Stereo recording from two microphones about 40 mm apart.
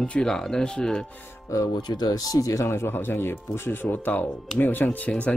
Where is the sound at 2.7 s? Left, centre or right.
Left.